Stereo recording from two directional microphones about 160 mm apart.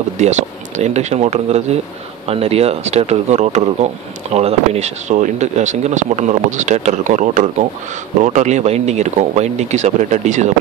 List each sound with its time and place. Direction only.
0.2 s speech: 45° right (ahead or behind)